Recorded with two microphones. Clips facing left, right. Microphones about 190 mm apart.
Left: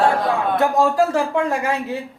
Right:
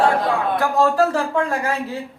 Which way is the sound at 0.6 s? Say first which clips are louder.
Left 1 dB; 15° left (ahead or behind).